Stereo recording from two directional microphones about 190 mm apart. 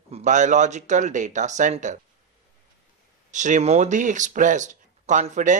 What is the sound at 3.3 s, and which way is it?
Speech, 40° right (ahead or behind).